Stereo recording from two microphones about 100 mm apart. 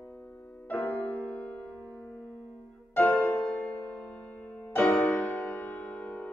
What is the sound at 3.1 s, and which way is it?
Music, 5° left (ahead or behind).